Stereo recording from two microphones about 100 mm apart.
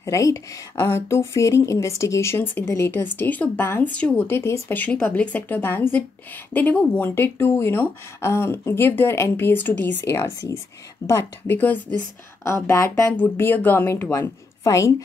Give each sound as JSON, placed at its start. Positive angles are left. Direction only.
{"t": 0.0, "sound": "speech", "side_deg": 30}
{"t": 2.9, "sound": "speech", "side_deg": 20}
{"t": 4.3, "sound": "speech", "side_deg": 25}
{"t": 11.1, "sound": "speech", "side_deg": 25}
{"t": 12.4, "sound": "a woman's voice", "side_deg": 30}